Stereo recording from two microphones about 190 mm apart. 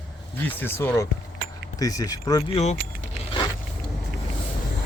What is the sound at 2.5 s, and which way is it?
Speech, 35° left (ahead or behind).